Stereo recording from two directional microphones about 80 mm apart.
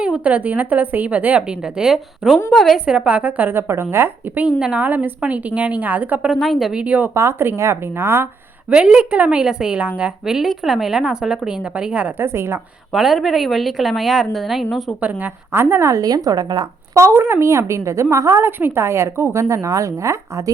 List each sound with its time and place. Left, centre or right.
0.0 s a woman's voice: centre
1.4 s a woman's voice: centre
2.8 s a woman's voice: centre; by 4.4 s right
4.4 s a woman's voice: centre
6.3 s speech: centre
6.8 s a woman's voice: centre
7.1 s a woman's voice: right
8.7 s a woman's voice: centre
12.2 s a woman's voice: right
12.9 s speech: centre
15.0 s a woman's voice: right
15.6 s a woman's voice: right
16.0 s a woman's voice: right
16.9 s a woman's voice: right